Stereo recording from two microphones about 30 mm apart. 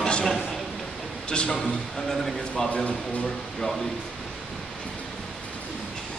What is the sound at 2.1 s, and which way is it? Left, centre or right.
Speech, centre.